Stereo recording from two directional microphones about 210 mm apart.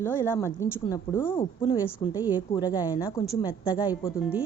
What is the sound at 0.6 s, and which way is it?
A woman's voice, 15° left (ahead or behind).